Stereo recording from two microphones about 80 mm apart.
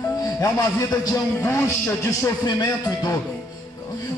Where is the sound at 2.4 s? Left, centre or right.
Left.